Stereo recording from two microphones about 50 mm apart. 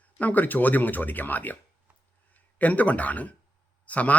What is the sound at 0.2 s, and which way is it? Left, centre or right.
Speech, left.